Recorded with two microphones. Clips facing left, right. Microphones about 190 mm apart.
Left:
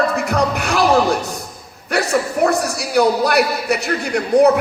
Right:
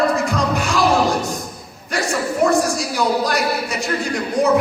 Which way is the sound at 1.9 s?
60° left (ahead or behind).